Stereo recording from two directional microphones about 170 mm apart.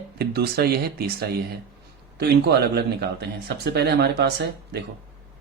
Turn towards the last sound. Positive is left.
turn(degrees=-75)  # may be behind; listen again after turning